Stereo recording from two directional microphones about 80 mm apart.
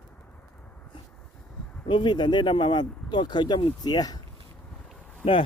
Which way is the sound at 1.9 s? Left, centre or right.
Left.